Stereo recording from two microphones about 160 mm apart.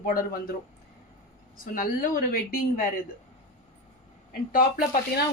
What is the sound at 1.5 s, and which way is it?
A woman's voice, 60° left (ahead or behind).